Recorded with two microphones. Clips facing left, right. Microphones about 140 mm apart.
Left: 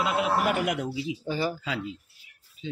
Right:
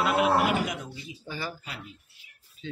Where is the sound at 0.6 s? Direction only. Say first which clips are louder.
Left 7 dB; 90° left.